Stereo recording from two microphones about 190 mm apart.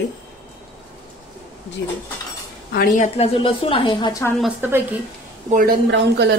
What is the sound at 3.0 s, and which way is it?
A woman's voice, 30° left (ahead or behind).